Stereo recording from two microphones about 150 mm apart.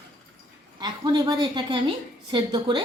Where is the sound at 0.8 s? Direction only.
30° right (ahead or behind).